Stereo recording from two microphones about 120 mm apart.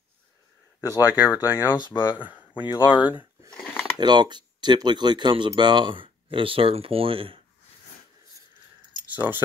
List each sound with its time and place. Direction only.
0.7 s speech: 25° left (ahead or behind)
1.9 s speech: 40° left (ahead or behind)
2.1 s speech: 10° right (ahead or behind)
2.6 s speech: 40° left (ahead or behind)
4.0 s speech: 35° right (ahead or behind)
9.1 s speech: 15° right (ahead or behind)